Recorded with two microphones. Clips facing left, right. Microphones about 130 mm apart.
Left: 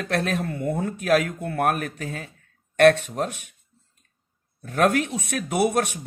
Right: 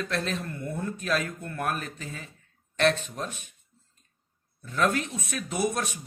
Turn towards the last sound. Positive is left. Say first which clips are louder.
# left 6 dB
turn(degrees=65)  # may be behind; listen again after turning